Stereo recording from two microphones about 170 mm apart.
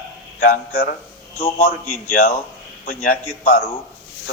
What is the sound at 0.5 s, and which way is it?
Speech, 60° left (ahead or behind).